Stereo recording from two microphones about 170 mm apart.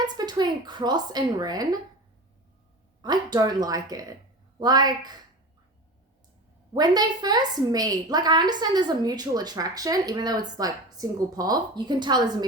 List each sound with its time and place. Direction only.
0.0 s a woman's voice: 25° right (ahead or behind)
3.0 s a woman's voice: 25° right (ahead or behind)
6.7 s a woman's voice: 25° right (ahead or behind)